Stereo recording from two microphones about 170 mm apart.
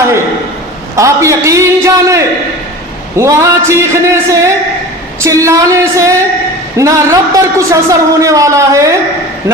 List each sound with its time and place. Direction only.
0.9 s speech: 15° right (ahead or behind)
3.2 s a man's voice: 15° right (ahead or behind)